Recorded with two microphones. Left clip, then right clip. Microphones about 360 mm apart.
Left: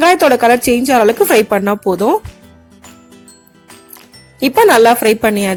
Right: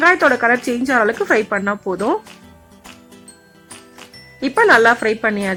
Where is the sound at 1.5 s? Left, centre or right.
Centre.